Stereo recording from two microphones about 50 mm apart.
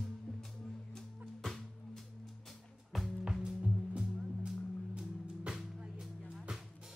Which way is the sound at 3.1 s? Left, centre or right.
Centre.